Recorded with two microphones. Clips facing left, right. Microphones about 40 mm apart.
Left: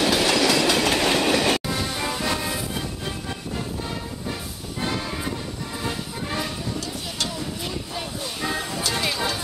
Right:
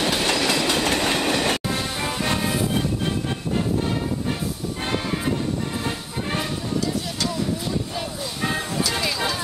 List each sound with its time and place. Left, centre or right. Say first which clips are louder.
0.3 s train: left 2 dB; centre
1.7 s music: right 1 dB; centre
8.4 s music: right 3 dB; centre